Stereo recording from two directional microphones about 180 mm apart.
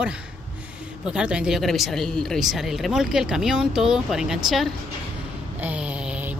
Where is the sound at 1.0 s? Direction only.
5° right (ahead or behind).